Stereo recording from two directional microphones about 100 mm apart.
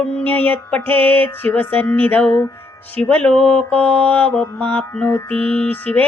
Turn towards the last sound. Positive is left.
turn(degrees=15)  # may be behind; listen again after turning